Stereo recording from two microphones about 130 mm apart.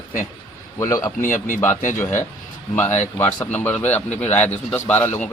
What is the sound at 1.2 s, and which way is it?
Speech, 85° left.